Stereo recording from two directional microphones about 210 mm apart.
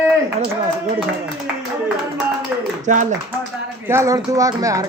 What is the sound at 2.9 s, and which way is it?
Speech, 35° right (ahead or behind).